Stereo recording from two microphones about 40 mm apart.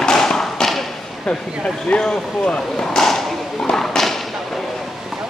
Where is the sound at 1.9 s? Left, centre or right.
Left.